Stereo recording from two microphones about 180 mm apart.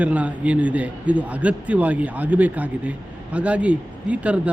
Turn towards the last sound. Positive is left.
turn(degrees=-5)  # may be behind; listen again after turning